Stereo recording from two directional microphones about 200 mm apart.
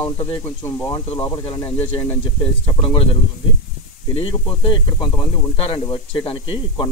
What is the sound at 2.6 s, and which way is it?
Speech, 25° left (ahead or behind).